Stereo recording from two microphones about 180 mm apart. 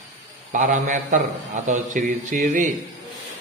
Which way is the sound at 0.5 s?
45° right (ahead or behind).